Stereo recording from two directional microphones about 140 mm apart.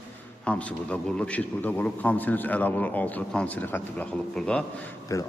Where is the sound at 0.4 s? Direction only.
10° left (ahead or behind).